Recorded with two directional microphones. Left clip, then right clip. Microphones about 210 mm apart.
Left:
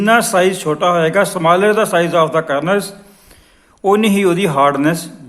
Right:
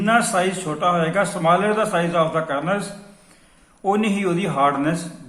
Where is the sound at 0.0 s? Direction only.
50° left (ahead or behind).